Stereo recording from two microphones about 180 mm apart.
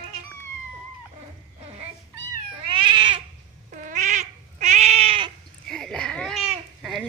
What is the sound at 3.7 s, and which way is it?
Cat, 45° right (ahead or behind).